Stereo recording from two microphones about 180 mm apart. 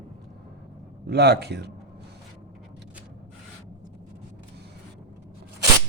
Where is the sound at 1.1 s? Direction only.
65° right (ahead or behind).